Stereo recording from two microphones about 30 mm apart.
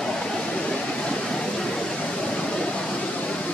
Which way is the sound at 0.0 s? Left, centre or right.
Left.